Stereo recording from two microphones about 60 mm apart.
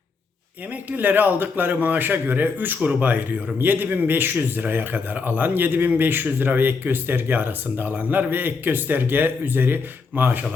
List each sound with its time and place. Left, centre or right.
0.7 s a man's voice: right